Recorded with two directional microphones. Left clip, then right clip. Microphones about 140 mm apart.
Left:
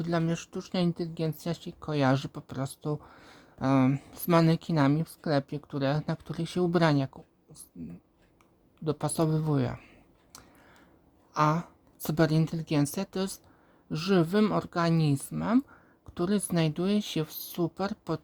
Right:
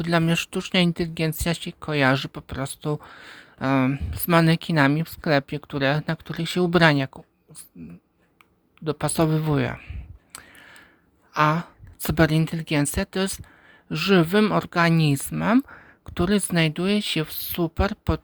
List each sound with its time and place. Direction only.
0.0 s speech: 25° right (ahead or behind)
0.3 s speech: 35° right (ahead or behind)
0.7 s speech: 20° right (ahead or behind)
7.8 s speech: centre (ahead or behind)
8.8 s a sound: 10° right (ahead or behind)
11.3 s speech: 10° right (ahead or behind)